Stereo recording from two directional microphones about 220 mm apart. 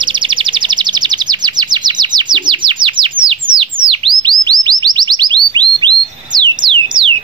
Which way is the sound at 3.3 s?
25° right (ahead or behind).